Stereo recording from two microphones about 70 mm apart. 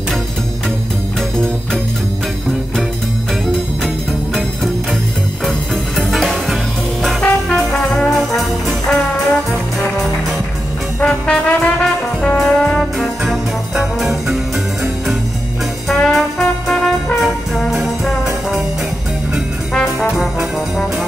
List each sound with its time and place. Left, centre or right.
3.4 s music: centre
11.0 s brass instrument: centre
13.9 s music: centre
15.9 s brass instrument: centre
20.0 s trombone: centre